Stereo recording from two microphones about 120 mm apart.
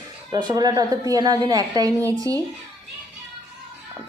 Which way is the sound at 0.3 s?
35° right (ahead or behind).